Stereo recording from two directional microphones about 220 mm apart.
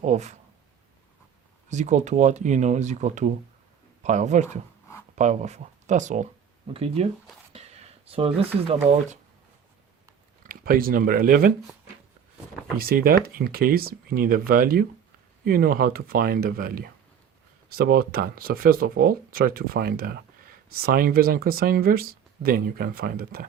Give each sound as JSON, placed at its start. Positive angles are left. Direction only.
{"t": 0.0, "sound": "speech", "side_deg": -30}
{"t": 1.7, "sound": "speech", "side_deg": -35}
{"t": 10.4, "sound": "speech", "side_deg": -40}
{"t": 12.8, "sound": "speech", "side_deg": -40}